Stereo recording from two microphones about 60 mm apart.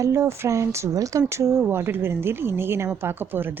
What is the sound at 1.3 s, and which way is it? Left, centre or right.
A woman's voice, right.